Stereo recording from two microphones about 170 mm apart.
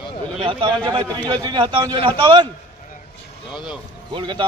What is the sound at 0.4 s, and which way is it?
A man's voice, 30° right (ahead or behind).